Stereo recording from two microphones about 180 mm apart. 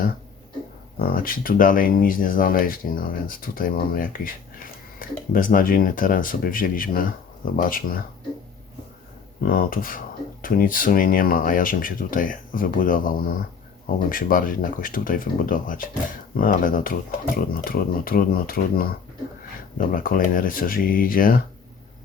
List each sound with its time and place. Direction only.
0.9 s speech: 55° left (ahead or behind)
9.4 s speech: 55° left (ahead or behind)